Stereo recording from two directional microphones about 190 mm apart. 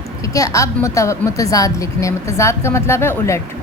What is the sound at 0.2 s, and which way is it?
A woman's voice, 15° left (ahead or behind).